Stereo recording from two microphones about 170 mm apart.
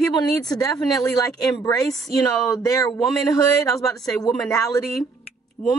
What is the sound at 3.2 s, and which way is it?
Speech, 20° left (ahead or behind).